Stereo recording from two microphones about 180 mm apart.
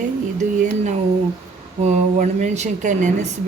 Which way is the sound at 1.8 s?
40° right (ahead or behind).